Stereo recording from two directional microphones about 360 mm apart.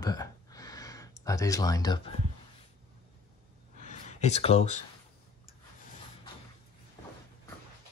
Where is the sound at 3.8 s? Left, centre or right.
Centre.